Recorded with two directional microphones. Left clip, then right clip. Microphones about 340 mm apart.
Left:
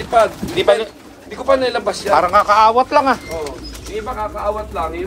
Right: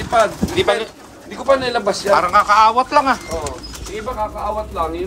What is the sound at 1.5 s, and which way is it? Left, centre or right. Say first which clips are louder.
Speech: even; centre.